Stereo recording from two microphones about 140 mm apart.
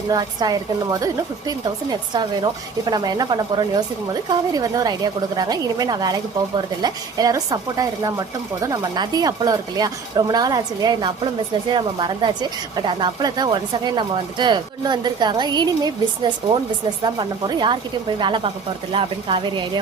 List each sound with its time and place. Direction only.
0.1 s a woman's voice: 30° right (ahead or behind)